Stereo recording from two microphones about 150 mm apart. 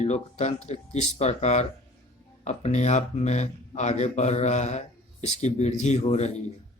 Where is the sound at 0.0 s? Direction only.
45° left (ahead or behind).